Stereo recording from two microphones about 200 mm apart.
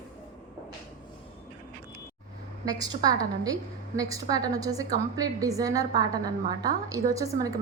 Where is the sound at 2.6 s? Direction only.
20° right (ahead or behind).